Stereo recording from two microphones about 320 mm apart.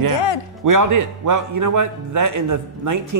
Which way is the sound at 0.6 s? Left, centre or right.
Right.